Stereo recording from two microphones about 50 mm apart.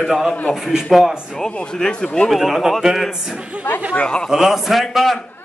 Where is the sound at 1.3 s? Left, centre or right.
Centre.